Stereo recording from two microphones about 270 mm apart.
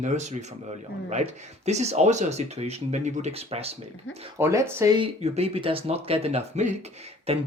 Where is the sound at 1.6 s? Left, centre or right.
Right.